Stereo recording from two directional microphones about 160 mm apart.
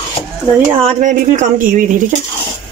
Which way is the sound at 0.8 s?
50° right (ahead or behind).